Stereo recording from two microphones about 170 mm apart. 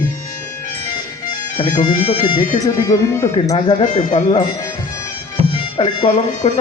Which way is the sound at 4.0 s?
45° left (ahead or behind).